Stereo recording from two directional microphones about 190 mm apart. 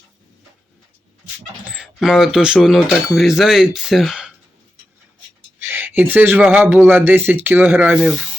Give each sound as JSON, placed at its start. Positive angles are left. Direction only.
{"t": 1.7, "sound": "speech", "side_deg": 0}
{"t": 5.5, "sound": "speech", "side_deg": -10}